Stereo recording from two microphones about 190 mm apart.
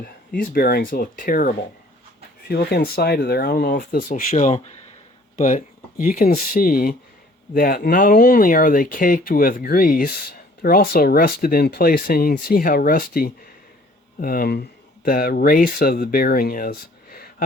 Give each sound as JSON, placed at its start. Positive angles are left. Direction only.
{"t": 0.0, "sound": "speech", "side_deg": 50}
{"t": 2.5, "sound": "speech", "side_deg": 55}